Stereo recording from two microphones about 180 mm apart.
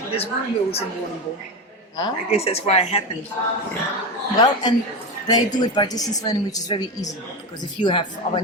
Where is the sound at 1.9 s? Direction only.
30° left (ahead or behind).